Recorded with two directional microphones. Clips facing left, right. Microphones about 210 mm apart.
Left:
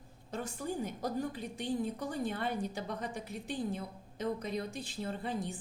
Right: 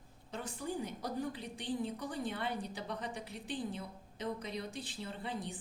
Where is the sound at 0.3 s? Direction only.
45° left (ahead or behind).